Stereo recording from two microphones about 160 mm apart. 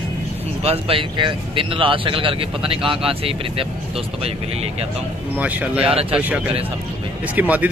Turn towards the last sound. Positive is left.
turn(degrees=-10)  # may be behind; listen again after turning